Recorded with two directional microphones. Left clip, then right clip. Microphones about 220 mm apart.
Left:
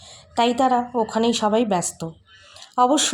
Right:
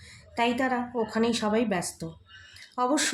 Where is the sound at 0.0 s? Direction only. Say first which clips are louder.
Left 7 dB; 30° left (ahead or behind).